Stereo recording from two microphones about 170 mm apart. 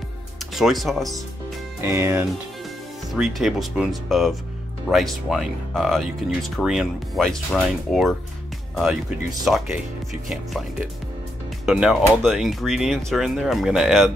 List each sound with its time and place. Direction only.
0.6 s speech: centre (ahead or behind)
1.8 s speech: 15° right (ahead or behind)
3.1 s speech: centre (ahead or behind)
9.4 s speech: centre (ahead or behind)
11.6 s speech: 5° right (ahead or behind)